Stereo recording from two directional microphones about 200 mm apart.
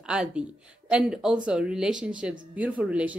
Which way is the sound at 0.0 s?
5° right (ahead or behind).